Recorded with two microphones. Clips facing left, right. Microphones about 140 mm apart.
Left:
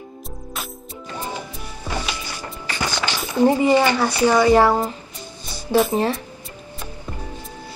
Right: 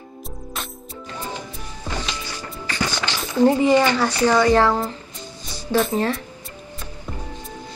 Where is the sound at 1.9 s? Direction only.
10° left (ahead or behind).